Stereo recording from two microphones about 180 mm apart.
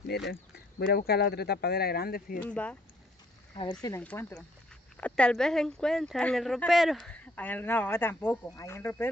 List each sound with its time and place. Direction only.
0.0 s speech: 65° left (ahead or behind)
2.4 s speech: 5° left (ahead or behind)
4.0 s speech: 10° left (ahead or behind)